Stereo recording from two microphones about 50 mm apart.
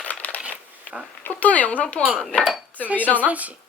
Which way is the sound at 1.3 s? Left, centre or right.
Left.